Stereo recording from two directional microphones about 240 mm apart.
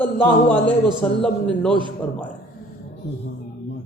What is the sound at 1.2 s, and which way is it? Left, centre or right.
Speech, centre.